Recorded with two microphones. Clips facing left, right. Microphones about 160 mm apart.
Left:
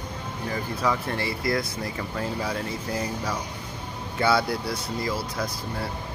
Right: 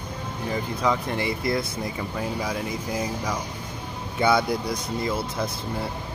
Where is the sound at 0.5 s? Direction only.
20° right (ahead or behind).